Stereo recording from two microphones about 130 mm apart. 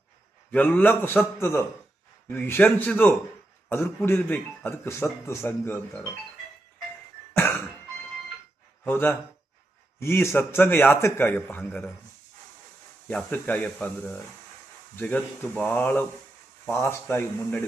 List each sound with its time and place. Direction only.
0.5 s speech: 15° left (ahead or behind)
8.8 s speech: 15° left (ahead or behind)
13.1 s speech: 10° left (ahead or behind)